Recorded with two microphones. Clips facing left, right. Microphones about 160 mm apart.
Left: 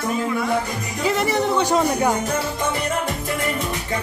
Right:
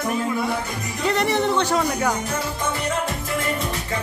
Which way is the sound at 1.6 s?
20° left (ahead or behind).